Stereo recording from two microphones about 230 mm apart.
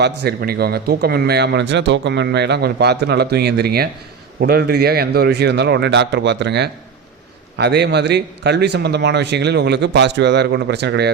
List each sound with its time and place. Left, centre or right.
0.0 s a man's voice: right